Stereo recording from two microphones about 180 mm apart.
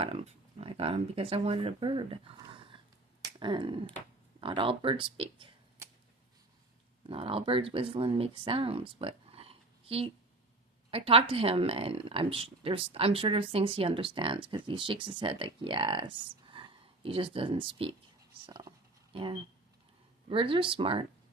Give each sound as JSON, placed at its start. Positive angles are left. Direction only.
{"t": 0.0, "sound": "speech", "side_deg": -35}
{"t": 3.2, "sound": "finger snapping", "side_deg": -25}
{"t": 4.4, "sound": "speech", "side_deg": -30}
{"t": 7.1, "sound": "speech", "side_deg": -30}